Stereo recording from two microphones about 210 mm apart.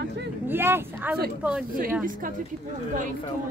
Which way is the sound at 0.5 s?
10° right (ahead or behind).